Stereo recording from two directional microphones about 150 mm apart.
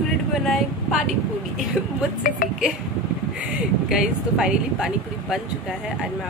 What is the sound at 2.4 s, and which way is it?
Speech, 65° left (ahead or behind).